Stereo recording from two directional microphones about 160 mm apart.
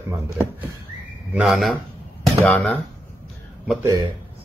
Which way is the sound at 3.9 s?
20° right (ahead or behind).